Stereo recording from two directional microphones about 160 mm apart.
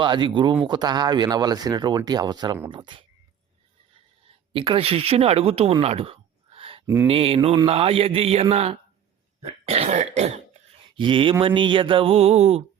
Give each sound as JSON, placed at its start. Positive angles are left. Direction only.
{"t": 0.0, "sound": "speech", "side_deg": -30}
{"t": 4.5, "sound": "speech", "side_deg": -35}
{"t": 5.8, "sound": "a sound", "side_deg": -40}
{"t": 6.8, "sound": "mantra", "side_deg": -15}
{"t": 7.1, "sound": "speech", "side_deg": -35}